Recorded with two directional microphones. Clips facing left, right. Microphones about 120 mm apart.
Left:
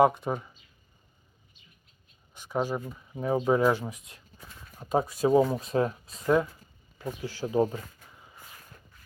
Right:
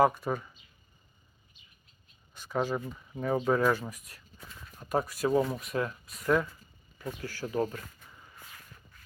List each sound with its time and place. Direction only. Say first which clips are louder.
0.0 s speech: left 3 dB; 20° left (ahead or behind)
2.3 s speech: left 1 dB; 15° left (ahead or behind)